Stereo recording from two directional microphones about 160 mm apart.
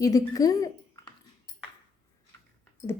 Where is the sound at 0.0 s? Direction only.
20° left (ahead or behind).